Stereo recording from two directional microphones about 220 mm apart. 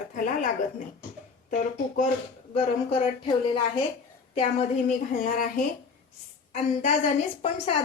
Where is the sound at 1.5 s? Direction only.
35° left (ahead or behind).